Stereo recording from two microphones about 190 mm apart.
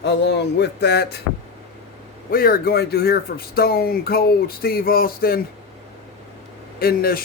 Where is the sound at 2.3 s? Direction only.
50° left (ahead or behind).